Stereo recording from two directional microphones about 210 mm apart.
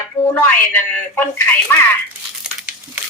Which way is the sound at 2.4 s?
5° right (ahead or behind).